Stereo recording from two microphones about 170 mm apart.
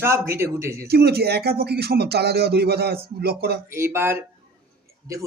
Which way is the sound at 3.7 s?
15° right (ahead or behind).